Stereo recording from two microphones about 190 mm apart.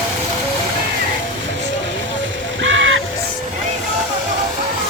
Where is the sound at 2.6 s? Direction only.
85° right.